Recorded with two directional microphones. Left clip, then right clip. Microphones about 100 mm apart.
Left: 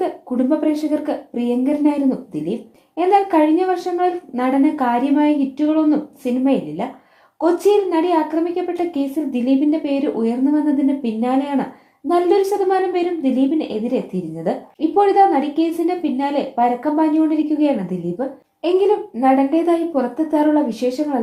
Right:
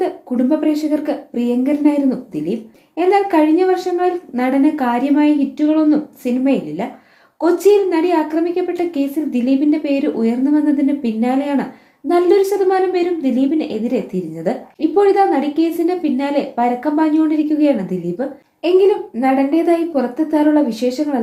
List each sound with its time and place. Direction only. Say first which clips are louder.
0.0 s a woman's voice: right 2 dB; 30° left (ahead or behind)